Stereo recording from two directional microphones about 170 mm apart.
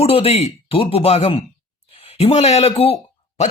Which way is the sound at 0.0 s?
35° left (ahead or behind).